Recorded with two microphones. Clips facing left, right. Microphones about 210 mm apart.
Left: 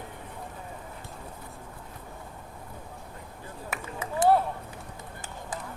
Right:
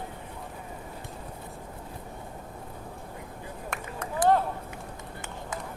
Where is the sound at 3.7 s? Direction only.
5° left (ahead or behind).